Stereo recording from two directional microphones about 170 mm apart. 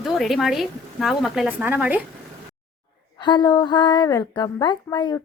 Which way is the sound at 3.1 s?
25° left (ahead or behind).